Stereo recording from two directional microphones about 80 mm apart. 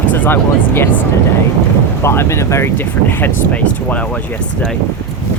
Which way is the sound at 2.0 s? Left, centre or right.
Left.